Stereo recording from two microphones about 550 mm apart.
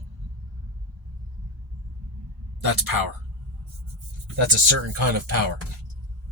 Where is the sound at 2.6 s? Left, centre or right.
Right.